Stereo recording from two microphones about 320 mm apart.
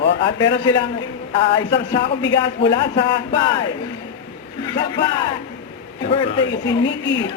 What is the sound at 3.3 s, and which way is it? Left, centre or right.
Speech, centre.